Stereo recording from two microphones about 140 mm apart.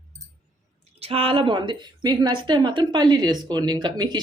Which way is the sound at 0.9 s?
45° right (ahead or behind).